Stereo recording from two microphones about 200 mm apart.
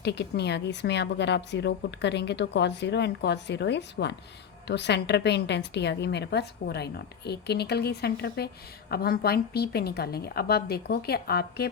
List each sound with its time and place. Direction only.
0.0 s a woman's voice: 55° left (ahead or behind)